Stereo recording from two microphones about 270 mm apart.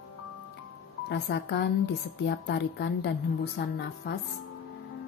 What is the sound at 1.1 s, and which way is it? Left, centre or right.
A woman's voice, left.